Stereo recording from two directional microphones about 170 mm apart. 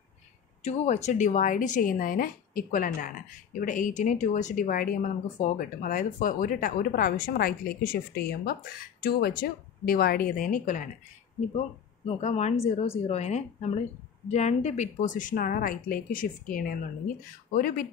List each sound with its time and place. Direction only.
0.7 s speech: 40° left (ahead or behind)
12.2 s speech: 40° left (ahead or behind); by 17.8 s 60° left (ahead or behind)